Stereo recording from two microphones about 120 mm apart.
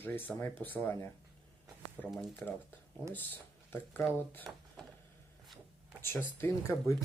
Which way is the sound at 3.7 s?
20° left (ahead or behind).